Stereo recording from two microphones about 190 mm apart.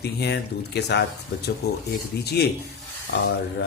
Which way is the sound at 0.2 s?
60° left (ahead or behind).